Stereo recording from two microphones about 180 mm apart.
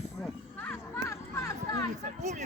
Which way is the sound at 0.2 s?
10° left (ahead or behind).